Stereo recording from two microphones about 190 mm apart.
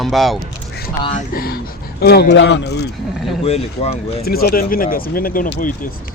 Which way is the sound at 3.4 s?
30° left (ahead or behind).